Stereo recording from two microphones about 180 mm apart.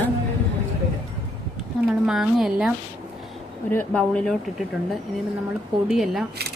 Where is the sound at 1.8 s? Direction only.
5° right (ahead or behind).